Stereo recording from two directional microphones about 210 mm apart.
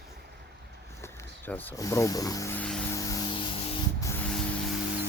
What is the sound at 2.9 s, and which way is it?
Music, 15° left (ahead or behind).